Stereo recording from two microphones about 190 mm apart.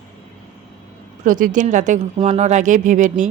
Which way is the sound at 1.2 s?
45° right (ahead or behind).